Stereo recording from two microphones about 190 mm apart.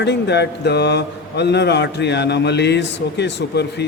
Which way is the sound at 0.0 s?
65° left (ahead or behind).